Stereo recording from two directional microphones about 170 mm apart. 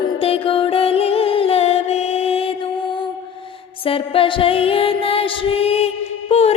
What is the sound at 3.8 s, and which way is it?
Music, 35° left (ahead or behind).